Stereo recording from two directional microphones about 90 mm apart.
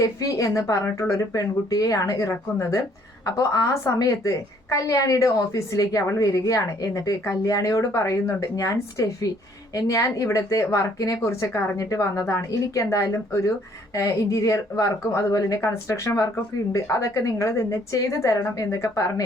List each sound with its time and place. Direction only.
0.0 s a woman's voice: 40° left (ahead or behind)